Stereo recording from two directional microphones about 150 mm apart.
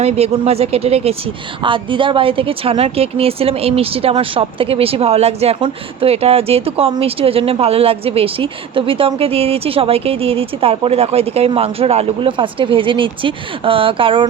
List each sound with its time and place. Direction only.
0.0 s a woman's voice: 45° right (ahead or behind)